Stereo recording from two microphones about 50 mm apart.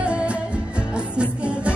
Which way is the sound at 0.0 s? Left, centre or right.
Right.